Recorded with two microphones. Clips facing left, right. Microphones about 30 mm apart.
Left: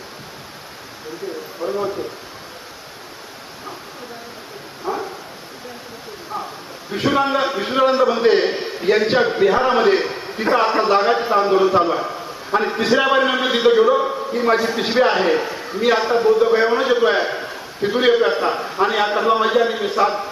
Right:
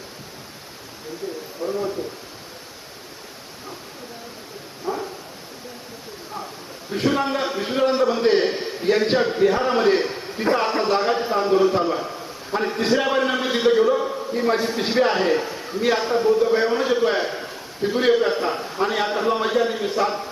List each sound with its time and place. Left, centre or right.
1.6 s speech: left
4.9 s bow-wow: left
6.9 s a man's voice: left
8.3 s a man's voice: left
9.9 s a sound: left
10.5 s a man's voice: left
14.8 s a man's voice: left
17.1 s a man's voice: left
18.8 s a man's voice: left